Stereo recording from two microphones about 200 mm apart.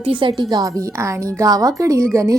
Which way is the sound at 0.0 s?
25° right (ahead or behind).